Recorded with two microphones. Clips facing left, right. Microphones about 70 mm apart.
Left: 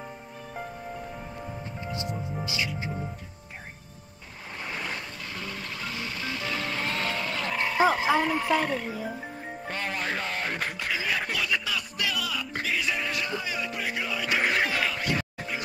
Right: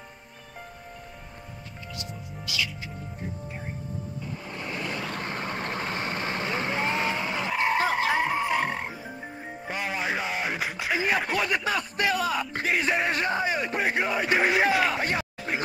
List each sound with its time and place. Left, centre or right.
2.4 s music: left
5.2 s vehicle: right; by 8.7 s centre
8.7 s frog: right
9.7 s music: centre
10.9 s snicker: right
11.3 s a sound: right
12.6 s music: right
14.4 s music: centre
14.9 s music: right